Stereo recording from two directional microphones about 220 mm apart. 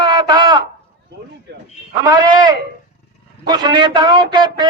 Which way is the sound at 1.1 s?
50° right (ahead or behind).